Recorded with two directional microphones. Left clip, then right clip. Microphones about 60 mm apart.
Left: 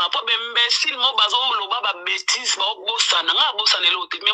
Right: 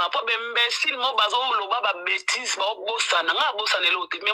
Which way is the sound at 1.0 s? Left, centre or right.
Left.